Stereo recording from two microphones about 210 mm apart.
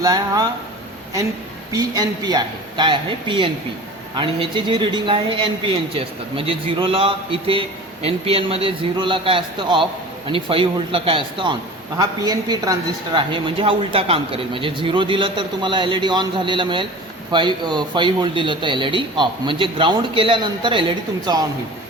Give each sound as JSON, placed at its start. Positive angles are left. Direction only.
{"t": 0.0, "sound": "speech", "side_deg": -15}
{"t": 1.7, "sound": "speech", "side_deg": -15}